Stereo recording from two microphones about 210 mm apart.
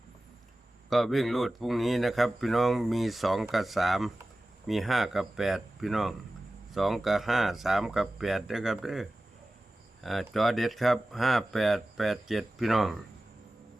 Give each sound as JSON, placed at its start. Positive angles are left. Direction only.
{"t": 0.9, "sound": "speech", "side_deg": 0}